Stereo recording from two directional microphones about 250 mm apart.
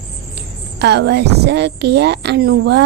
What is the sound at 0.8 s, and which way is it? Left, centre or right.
A woman's voice, right.